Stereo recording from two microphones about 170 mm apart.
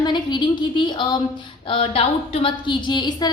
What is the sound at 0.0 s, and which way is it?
A woman's voice, 25° left (ahead or behind).